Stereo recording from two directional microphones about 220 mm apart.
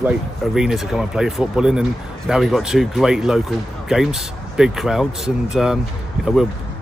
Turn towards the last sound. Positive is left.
turn(degrees=0)  # may be behind; listen again after turning